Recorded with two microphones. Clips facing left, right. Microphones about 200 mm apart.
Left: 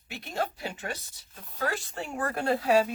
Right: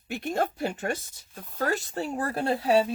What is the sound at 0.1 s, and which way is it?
Speech, 50° right (ahead or behind).